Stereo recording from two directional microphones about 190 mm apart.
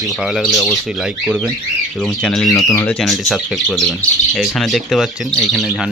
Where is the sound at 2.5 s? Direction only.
20° left (ahead or behind).